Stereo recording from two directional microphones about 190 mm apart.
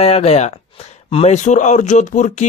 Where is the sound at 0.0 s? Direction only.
35° left (ahead or behind).